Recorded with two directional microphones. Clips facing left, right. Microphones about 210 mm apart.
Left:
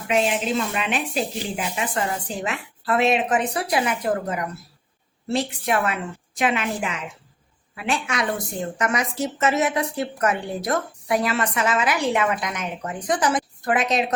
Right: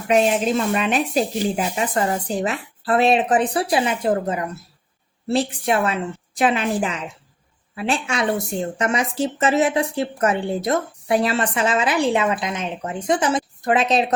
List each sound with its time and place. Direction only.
0.1 s a woman's voice: 40° right (ahead or behind)